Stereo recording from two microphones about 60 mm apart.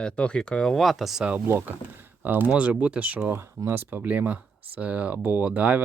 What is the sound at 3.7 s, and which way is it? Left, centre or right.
Speech, right.